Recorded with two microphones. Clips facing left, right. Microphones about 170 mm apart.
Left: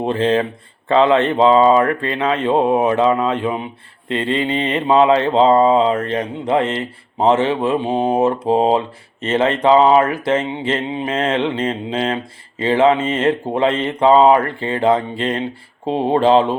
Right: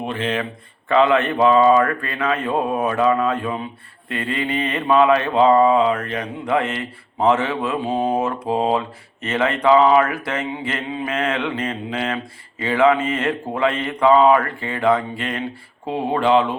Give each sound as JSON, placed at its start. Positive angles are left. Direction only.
{"t": 0.0, "sound": "speech", "side_deg": 30}
{"t": 0.9, "sound": "a sound", "side_deg": 30}
{"t": 15.9, "sound": "speech", "side_deg": 30}